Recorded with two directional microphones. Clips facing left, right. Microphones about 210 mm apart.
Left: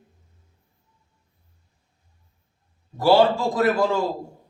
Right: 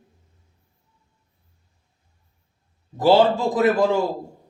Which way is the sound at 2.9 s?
20° right (ahead or behind).